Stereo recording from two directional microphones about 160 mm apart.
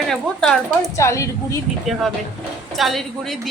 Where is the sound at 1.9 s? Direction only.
Centre (ahead or behind).